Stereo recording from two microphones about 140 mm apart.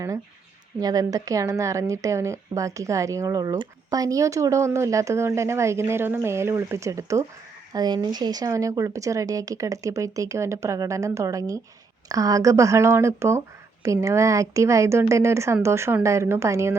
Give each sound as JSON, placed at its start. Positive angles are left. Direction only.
{"t": 0.8, "sound": "speech", "side_deg": -25}